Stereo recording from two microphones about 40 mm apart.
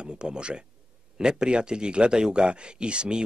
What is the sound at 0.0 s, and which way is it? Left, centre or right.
Speech, right.